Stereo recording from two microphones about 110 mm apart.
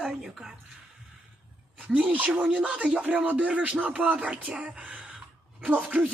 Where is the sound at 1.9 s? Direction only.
15° right (ahead or behind).